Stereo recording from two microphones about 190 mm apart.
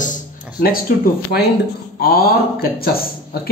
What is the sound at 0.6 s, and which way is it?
Speech, 50° left (ahead or behind).